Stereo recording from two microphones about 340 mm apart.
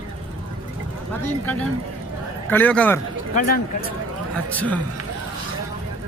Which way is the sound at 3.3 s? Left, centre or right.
Left.